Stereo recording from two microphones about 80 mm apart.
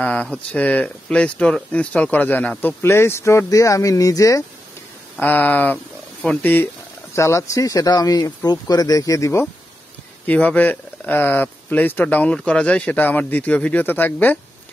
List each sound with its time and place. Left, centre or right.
0.0 s speech: centre
2.6 s speech: left
5.2 s speech: left
10.2 s speech: centre